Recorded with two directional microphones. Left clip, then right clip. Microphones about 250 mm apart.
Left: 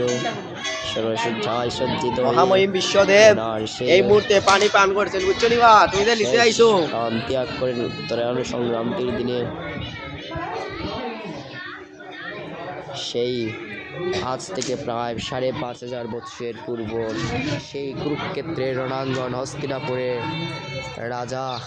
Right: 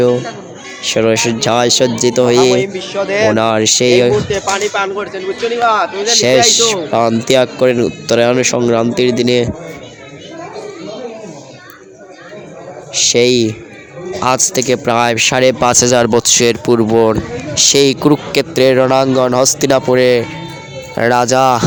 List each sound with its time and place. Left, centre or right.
0.9 s speech: right
2.5 s speech: centre
3.3 s speech: right
4.3 s speech: centre
6.9 s speech: right
12.9 s a sound: right
14.3 s speech: right